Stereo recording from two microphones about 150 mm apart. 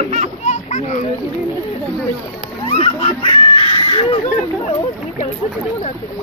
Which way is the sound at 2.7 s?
40° left (ahead or behind).